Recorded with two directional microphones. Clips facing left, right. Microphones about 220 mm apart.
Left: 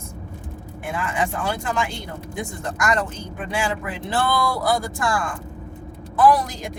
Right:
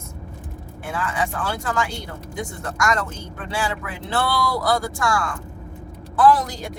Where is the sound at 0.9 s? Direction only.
15° left (ahead or behind).